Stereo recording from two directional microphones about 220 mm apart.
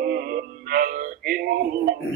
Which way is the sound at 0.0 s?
40° right (ahead or behind).